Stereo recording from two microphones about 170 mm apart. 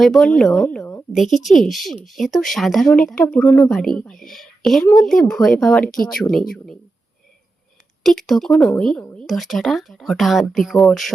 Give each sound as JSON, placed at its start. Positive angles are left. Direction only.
{"t": 0.0, "sound": "speech", "side_deg": 0}
{"t": 3.2, "sound": "speech", "side_deg": 15}
{"t": 3.7, "sound": "speech", "side_deg": 5}
{"t": 8.0, "sound": "speech", "side_deg": 0}